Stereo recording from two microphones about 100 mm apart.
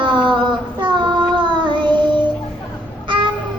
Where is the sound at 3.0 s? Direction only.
55° right (ahead or behind).